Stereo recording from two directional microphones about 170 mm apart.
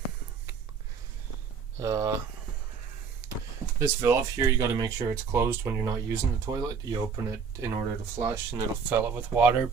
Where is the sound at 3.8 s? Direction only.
15° right (ahead or behind).